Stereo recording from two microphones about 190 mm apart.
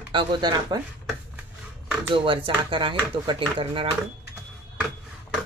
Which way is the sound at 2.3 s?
25° right (ahead or behind).